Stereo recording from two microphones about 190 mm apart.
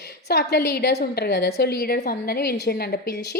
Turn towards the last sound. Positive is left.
turn(degrees=55)  # may be behind; listen again after turning